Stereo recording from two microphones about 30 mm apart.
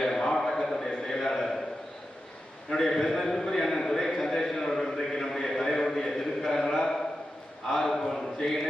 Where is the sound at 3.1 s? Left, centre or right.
Centre.